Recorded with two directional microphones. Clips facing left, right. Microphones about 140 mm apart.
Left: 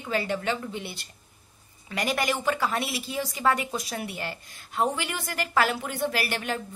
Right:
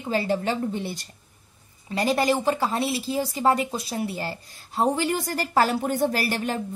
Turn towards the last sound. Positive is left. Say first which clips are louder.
# right 3 dB
turn(degrees=-35)  # may be behind; listen again after turning